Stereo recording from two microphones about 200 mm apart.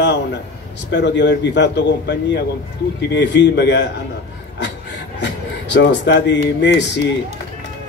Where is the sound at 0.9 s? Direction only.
60° left (ahead or behind).